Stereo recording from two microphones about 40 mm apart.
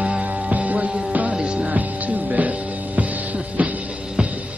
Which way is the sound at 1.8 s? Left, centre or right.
Right.